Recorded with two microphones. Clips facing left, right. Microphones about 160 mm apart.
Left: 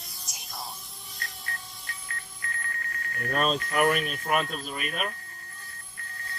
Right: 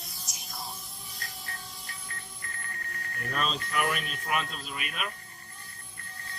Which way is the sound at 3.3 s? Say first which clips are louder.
Left 5 dB; 50° left (ahead or behind).